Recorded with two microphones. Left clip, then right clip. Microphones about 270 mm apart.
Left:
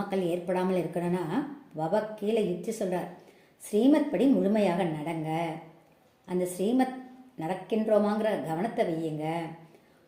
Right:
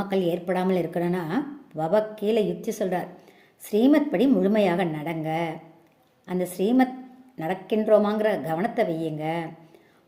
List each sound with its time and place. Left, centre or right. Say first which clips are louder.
0.1 s a woman's voice: right 4 dB; right